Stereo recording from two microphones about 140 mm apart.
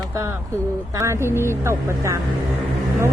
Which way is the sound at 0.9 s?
20° right (ahead or behind).